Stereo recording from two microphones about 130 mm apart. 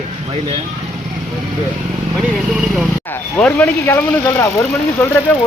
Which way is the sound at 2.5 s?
5° right (ahead or behind).